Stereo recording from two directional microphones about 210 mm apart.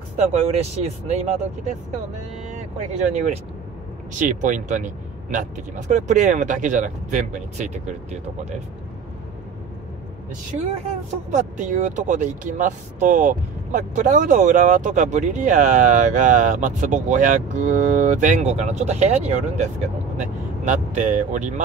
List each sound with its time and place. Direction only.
0.3 s speech: 30° right (ahead or behind)
2.4 s vehicle: 35° right (ahead or behind)
4.2 s speech: 40° right (ahead or behind)
11.3 s speech: 35° right (ahead or behind)